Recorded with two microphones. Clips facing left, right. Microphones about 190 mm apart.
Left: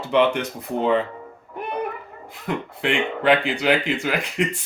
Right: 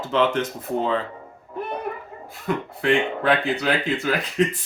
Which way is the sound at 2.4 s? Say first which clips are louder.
Right 2 dB; 20° left (ahead or behind).